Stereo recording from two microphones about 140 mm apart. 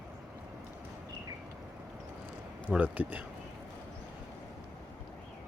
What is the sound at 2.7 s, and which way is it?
Speech, 10° right (ahead or behind).